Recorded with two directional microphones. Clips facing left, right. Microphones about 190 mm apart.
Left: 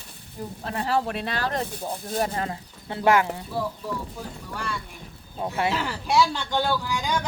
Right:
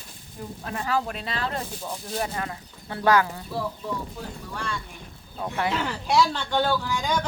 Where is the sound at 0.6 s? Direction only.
30° left (ahead or behind).